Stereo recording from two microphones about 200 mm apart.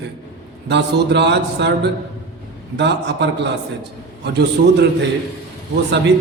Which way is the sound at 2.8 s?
60° right (ahead or behind).